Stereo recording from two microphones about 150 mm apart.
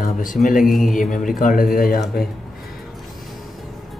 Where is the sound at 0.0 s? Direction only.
65° left (ahead or behind).